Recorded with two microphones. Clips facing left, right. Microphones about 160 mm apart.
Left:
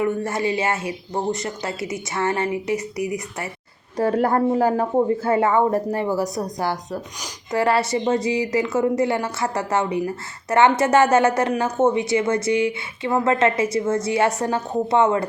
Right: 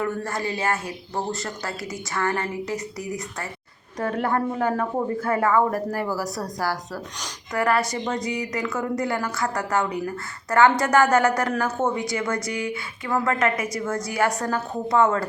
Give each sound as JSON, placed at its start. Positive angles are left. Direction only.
{"t": 0.0, "sound": "speech", "side_deg": 20}
{"t": 3.9, "sound": "speech", "side_deg": 35}